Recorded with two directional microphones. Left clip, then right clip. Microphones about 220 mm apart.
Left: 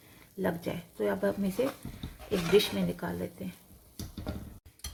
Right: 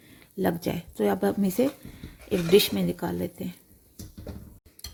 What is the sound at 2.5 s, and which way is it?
Speech, 50° right (ahead or behind).